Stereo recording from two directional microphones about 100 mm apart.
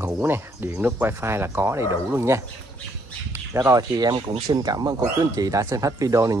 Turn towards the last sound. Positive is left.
turn(degrees=-35)  # may be behind; listen again after turning